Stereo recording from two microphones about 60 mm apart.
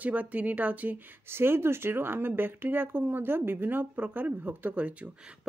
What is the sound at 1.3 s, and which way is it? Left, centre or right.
Speech, right.